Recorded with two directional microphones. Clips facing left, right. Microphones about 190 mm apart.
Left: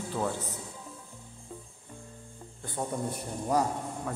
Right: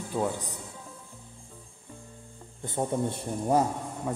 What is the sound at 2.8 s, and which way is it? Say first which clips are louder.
Speech: right 4 dB; 25° right (ahead or behind).